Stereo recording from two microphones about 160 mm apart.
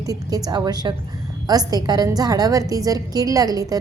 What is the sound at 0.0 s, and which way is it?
A woman's voice, 20° right (ahead or behind).